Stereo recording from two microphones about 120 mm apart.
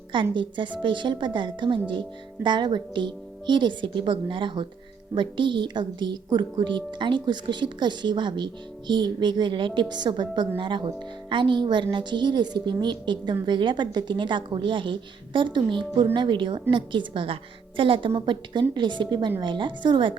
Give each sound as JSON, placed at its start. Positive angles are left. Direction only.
{"t": 0.1, "sound": "a woman's voice", "side_deg": -40}